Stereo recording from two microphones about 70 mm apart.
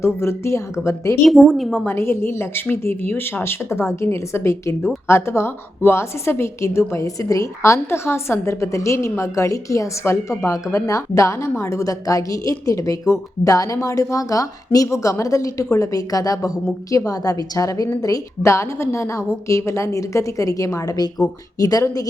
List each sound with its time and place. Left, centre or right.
0.0 s a woman's voice: left
1.2 s a woman's voice: centre
1.9 s a woman's voice: left